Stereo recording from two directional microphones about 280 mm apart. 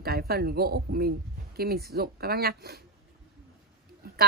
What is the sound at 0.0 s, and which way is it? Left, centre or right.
Speech, right.